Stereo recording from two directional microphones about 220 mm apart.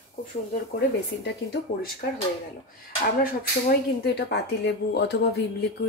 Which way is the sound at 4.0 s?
50° left (ahead or behind).